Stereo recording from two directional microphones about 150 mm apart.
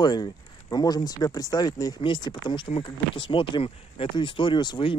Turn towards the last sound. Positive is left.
turn(degrees=30)  # may be behind; listen again after turning